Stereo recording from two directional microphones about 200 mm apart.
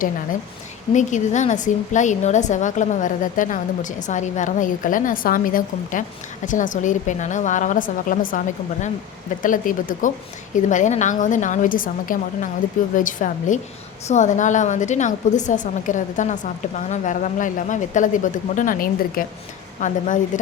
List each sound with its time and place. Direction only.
0.9 s a woman's voice: 35° left (ahead or behind)
9.4 s a woman's voice: 40° left (ahead or behind)